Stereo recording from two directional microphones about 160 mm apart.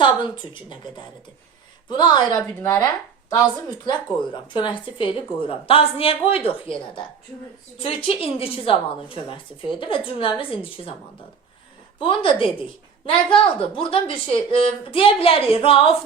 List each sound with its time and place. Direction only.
1.9 s speech: 30° left (ahead or behind)
4.5 s a woman's voice: 30° left (ahead or behind)
7.8 s a woman's voice: 35° left (ahead or behind)
11.9 s a woman's voice: 35° left (ahead or behind)